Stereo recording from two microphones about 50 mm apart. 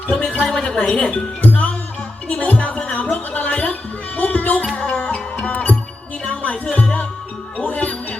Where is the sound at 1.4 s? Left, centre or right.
Left.